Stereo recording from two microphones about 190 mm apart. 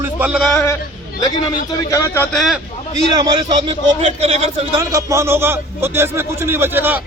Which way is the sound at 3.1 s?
25° right (ahead or behind).